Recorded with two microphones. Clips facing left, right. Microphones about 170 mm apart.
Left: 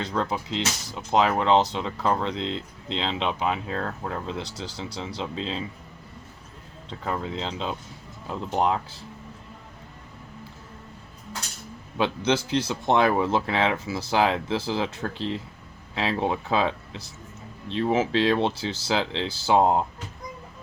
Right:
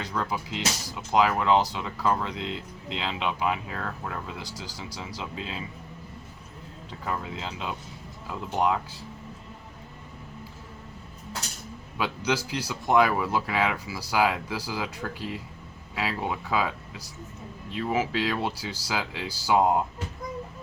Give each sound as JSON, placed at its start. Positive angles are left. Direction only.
{"t": 0.0, "sound": "speech", "side_deg": 25}
{"t": 7.0, "sound": "speech", "side_deg": 30}
{"t": 11.9, "sound": "speech", "side_deg": 25}